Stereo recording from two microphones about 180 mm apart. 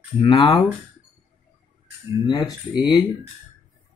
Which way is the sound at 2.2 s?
20° left (ahead or behind).